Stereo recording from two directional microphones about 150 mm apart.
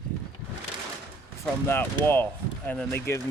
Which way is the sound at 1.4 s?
15° left (ahead or behind).